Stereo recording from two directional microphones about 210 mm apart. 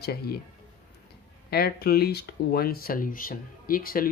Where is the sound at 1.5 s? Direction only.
50° left (ahead or behind).